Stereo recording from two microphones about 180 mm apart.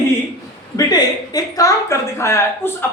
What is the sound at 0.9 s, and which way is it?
A man's voice, 20° left (ahead or behind).